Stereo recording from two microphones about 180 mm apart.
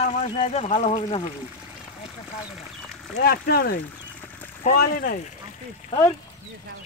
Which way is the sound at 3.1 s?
60° left (ahead or behind).